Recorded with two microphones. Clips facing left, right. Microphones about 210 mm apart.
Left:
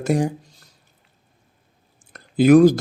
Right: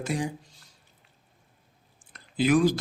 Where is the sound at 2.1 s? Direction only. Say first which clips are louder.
Left 10 dB; 45° left (ahead or behind).